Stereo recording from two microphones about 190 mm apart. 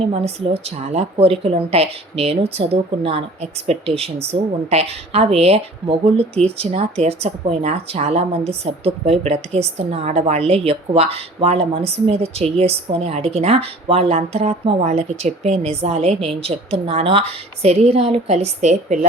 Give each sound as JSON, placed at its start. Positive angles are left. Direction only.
{"t": 0.1, "sound": "speech", "side_deg": -30}